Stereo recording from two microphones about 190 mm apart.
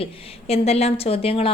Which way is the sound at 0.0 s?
30° left (ahead or behind).